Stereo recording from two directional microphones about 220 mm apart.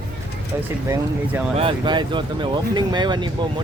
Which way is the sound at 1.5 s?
25° right (ahead or behind).